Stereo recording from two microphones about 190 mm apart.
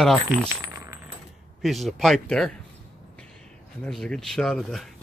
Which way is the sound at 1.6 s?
Centre (ahead or behind).